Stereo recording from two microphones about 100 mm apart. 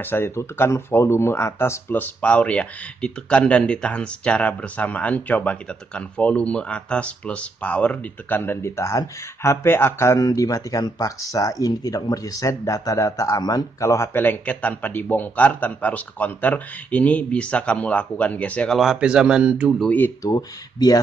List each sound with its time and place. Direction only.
0.0 s speech: 20° left (ahead or behind)
18.8 s a man's voice: 5° right (ahead or behind)
20.2 s speech: 40° left (ahead or behind)